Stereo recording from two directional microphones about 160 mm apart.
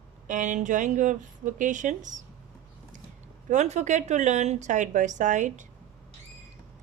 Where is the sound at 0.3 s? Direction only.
50° right (ahead or behind).